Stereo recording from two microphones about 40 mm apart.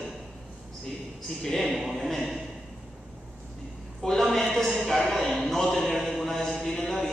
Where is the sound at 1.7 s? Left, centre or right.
Centre.